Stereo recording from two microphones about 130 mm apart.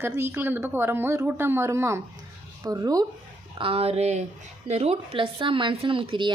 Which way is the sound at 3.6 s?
45° right (ahead or behind).